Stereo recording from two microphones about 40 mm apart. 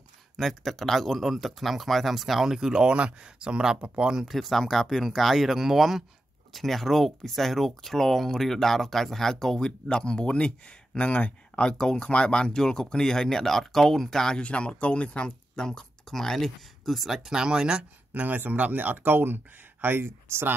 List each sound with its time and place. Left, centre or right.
0.4 s speech: centre
4.3 s speech: centre
14.4 s speech: left; by 17.8 s centre
18.1 s speech: right